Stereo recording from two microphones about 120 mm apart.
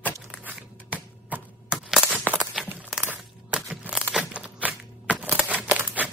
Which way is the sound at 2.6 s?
15° right (ahead or behind).